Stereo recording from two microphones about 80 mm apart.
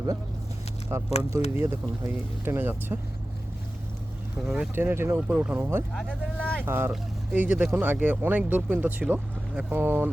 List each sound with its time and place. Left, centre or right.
0.9 s speech: right
4.4 s speech: centre
4.7 s speech: right
5.9 s speech: centre
6.7 s speech: right
7.3 s speech: centre